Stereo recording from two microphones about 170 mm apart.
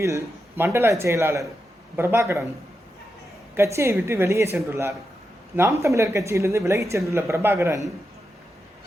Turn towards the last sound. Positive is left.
turn(degrees=-15)  # may be behind; listen again after turning